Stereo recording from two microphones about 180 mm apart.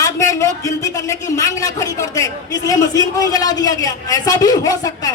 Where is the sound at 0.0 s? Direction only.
15° left (ahead or behind).